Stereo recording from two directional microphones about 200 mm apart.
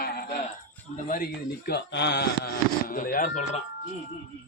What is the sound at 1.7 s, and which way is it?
Speech, 60° left (ahead or behind).